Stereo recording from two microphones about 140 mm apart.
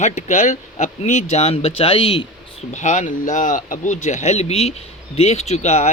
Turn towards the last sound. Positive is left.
turn(degrees=50)  # may be behind; listen again after turning